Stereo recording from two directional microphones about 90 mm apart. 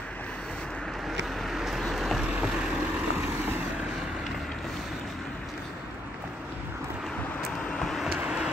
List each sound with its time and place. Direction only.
1.0 s vehicle: centre (ahead or behind)
2.2 s vehicle: 15° right (ahead or behind)
7.7 s vehicle: centre (ahead or behind)
8.1 s vehicle: 10° right (ahead or behind)